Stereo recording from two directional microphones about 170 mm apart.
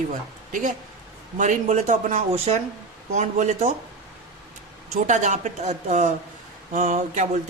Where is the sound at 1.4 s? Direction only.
45° right (ahead or behind).